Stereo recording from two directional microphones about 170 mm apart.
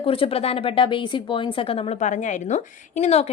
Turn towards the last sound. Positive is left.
turn(degrees=40)  # may be behind; listen again after turning